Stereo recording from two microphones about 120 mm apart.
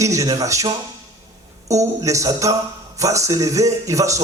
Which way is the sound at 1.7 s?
25° right (ahead or behind).